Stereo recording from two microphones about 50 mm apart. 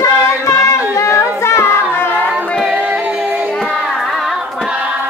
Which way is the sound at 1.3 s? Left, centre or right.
Left.